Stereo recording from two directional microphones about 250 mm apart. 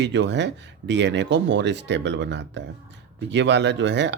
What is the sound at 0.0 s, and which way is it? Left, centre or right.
Speech, right.